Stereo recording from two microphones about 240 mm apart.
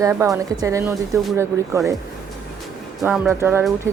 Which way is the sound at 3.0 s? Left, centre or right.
Centre.